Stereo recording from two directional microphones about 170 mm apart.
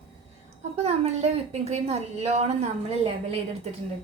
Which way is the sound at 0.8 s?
40° right (ahead or behind).